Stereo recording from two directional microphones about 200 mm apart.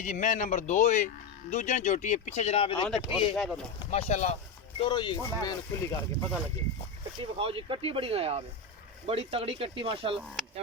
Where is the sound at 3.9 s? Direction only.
35° left (ahead or behind).